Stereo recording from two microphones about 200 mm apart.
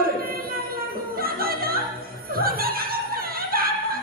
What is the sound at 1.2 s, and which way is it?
Music, 50° right (ahead or behind).